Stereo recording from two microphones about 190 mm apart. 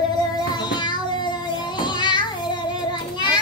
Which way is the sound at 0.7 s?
25° left (ahead or behind).